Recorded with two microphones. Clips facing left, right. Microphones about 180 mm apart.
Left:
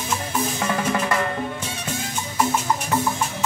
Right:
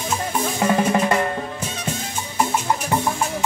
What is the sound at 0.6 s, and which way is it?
Drum, 30° right (ahead or behind).